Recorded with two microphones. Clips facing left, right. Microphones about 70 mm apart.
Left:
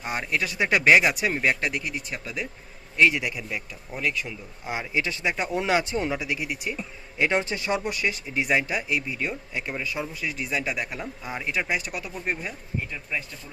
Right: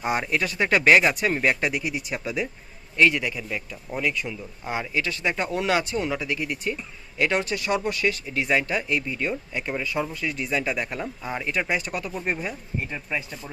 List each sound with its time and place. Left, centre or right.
0.0 s speech: centre
3.0 s speech: centre
4.9 s speech: left
7.2 s speech: left; by 12.5 s centre